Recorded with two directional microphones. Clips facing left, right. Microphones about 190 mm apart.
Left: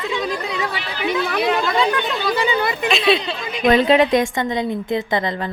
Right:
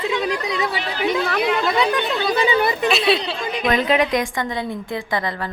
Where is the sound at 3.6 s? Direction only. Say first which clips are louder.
Left 5 dB; 30° left (ahead or behind).